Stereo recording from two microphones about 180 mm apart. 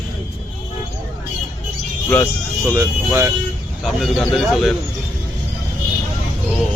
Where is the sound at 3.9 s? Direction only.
Centre (ahead or behind).